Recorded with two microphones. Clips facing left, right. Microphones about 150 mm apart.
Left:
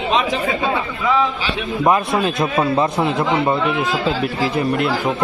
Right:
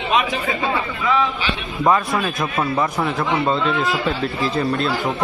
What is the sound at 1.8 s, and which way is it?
A man's voice, 20° left (ahead or behind).